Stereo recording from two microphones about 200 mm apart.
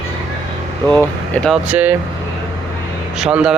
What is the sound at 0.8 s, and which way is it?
Speech, 10° left (ahead or behind).